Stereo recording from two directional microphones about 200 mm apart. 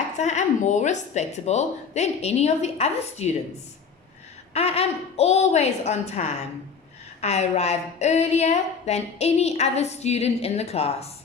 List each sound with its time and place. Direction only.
0.2 s a woman's voice: 35° left (ahead or behind)
4.5 s a woman's voice: 30° left (ahead or behind)